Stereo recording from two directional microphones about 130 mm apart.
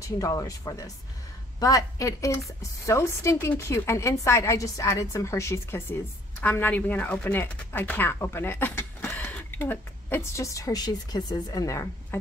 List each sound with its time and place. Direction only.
0.0 s a woman's voice: 25° left (ahead or behind)